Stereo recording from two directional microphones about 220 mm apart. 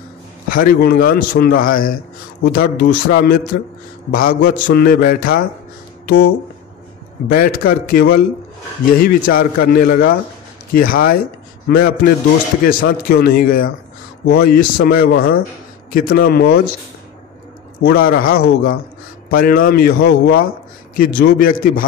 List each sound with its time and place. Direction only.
0.5 s a man's voice: 40° left (ahead or behind)
7.2 s a man's voice: 40° left (ahead or behind)
17.8 s a man's voice: 45° left (ahead or behind)